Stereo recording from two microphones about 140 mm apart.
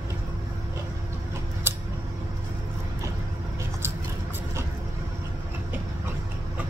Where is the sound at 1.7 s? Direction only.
15° right (ahead or behind).